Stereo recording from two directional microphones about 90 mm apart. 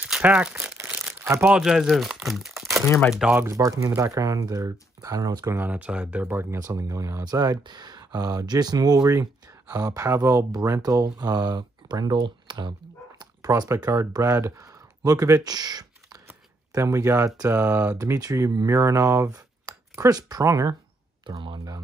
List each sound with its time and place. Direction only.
0.0 s crumpling: 15° right (ahead or behind)
1.5 s speech: 5° right (ahead or behind)
3.4 s speech: 35° right (ahead or behind)
5.5 s speech: 20° right (ahead or behind)
6.6 s speech: 40° right (ahead or behind)
16.7 s speech: 35° right (ahead or behind)
17.5 s speech: 20° right (ahead or behind)
17.9 s speech: 40° right (ahead or behind)
21.3 s speech: 65° right (ahead or behind)